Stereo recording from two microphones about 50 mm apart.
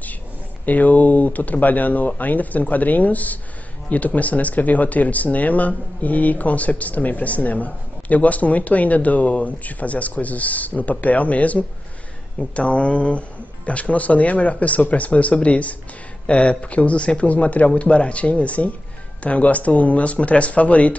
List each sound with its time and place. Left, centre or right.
0.7 s speech: left